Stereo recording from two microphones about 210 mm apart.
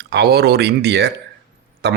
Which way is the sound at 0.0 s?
50° right (ahead or behind).